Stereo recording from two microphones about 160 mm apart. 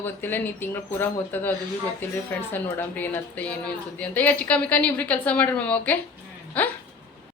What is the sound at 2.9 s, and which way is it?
A woman's voice, 10° left (ahead or behind).